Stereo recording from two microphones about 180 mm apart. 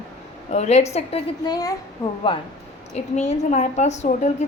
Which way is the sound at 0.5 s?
40° left (ahead or behind).